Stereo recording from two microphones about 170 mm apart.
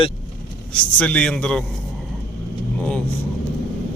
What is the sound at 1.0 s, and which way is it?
Speech, 5° left (ahead or behind).